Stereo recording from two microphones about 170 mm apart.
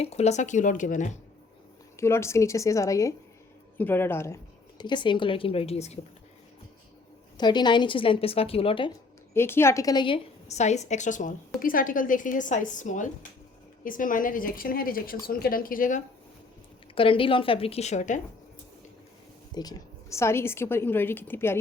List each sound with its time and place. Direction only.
0.0 s a woman's voice: 40° left (ahead or behind)
2.0 s a woman's voice: 15° left (ahead or behind)
4.8 s speech: 25° left (ahead or behind)
7.3 s speech: 25° left (ahead or behind)
9.3 s a woman's voice: 15° left (ahead or behind)
10.5 s a woman's voice: 40° left (ahead or behind)
16.9 s speech: 30° left (ahead or behind)
19.5 s a woman's voice: 20° left (ahead or behind)